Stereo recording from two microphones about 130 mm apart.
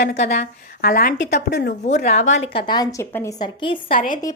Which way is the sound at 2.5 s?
35° left (ahead or behind).